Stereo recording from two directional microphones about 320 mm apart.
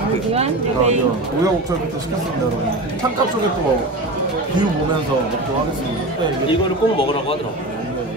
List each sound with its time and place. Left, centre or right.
0.3 s speech: centre
6.5 s a man's voice: centre